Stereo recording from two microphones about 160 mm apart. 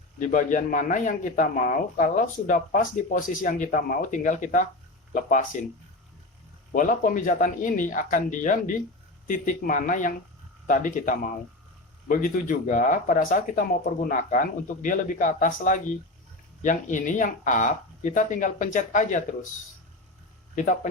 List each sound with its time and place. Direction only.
0.2 s a man's voice: 55° left (ahead or behind)
6.7 s a man's voice: 55° left (ahead or behind)